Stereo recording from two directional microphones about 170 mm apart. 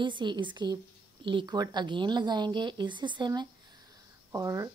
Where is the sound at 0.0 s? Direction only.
25° right (ahead or behind).